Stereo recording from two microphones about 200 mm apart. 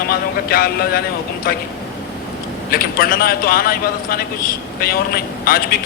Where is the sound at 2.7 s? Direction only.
50° left (ahead or behind).